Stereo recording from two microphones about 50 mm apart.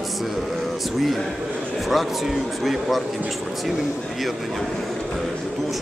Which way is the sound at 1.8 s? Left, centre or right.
Centre.